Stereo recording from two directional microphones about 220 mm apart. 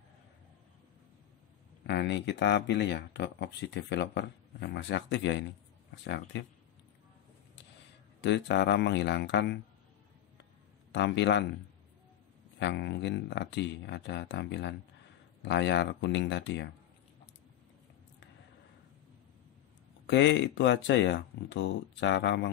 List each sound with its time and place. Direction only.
1.9 s speech: 50° left (ahead or behind)
8.2 s speech: 55° left (ahead or behind)
10.9 s speech: 55° left (ahead or behind)
12.5 s speech: 50° left (ahead or behind)
20.1 s speech: 55° left (ahead or behind)